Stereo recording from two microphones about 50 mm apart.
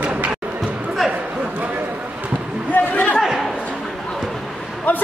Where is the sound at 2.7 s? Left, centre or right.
Left.